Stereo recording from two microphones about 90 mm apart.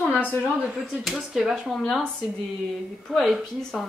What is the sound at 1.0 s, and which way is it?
Speech, 5° right (ahead or behind).